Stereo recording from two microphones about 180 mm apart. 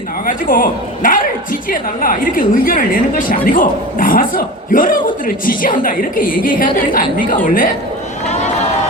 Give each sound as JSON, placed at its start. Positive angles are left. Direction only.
{"t": 0.3, "sound": "a woman's voice", "side_deg": 50}